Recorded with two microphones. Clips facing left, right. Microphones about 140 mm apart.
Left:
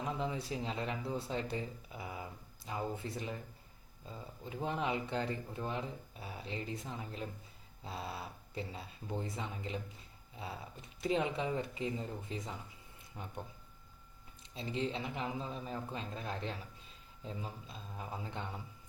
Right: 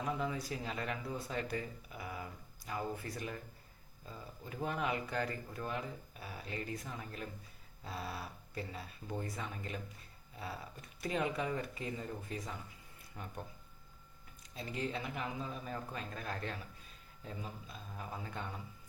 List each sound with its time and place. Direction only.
0.0 s speech: 25° left (ahead or behind)
14.5 s speech: 25° left (ahead or behind)